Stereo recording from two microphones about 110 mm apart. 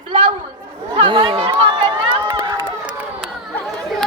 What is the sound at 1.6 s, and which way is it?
Run, 55° right (ahead or behind).